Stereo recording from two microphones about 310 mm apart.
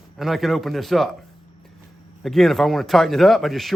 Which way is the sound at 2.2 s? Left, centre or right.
Centre.